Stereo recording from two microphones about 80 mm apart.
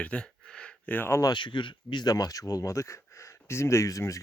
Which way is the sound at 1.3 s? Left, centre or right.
Left.